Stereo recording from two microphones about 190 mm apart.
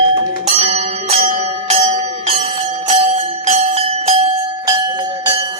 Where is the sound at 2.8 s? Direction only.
35° right (ahead or behind).